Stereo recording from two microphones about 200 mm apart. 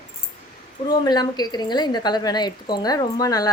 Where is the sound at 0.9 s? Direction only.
20° left (ahead or behind).